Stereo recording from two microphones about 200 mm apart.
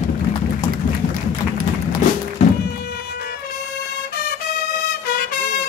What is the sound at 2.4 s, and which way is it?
Music, 30° left (ahead or behind).